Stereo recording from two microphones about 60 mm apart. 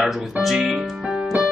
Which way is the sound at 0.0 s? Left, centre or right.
Centre.